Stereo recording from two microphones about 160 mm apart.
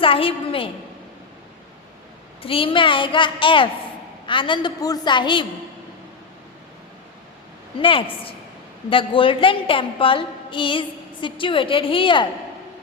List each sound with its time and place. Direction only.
0.0 s a woman's voice: 35° left (ahead or behind)
2.4 s a woman's voice: 35° left (ahead or behind)
7.8 s a woman's voice: 35° left (ahead or behind)